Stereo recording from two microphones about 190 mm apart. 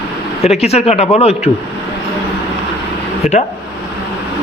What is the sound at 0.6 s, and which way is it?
Speech, 35° left (ahead or behind).